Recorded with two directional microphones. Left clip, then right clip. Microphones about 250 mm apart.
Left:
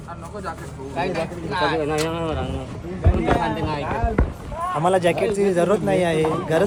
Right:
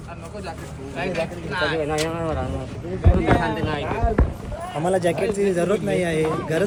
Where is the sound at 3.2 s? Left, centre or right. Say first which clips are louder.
Even; left.